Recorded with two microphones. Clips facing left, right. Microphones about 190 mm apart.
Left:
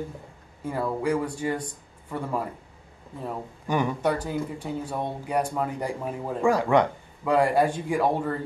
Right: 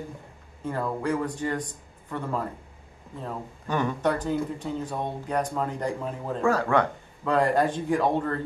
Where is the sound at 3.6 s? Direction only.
10° left (ahead or behind).